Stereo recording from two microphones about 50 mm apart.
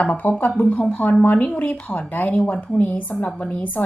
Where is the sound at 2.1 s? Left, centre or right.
Left.